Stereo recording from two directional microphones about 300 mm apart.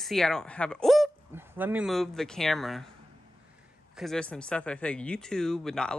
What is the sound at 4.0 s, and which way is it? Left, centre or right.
Speech, centre.